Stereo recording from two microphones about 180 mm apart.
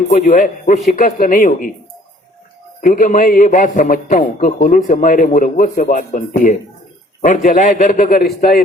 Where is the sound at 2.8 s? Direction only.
45° left (ahead or behind).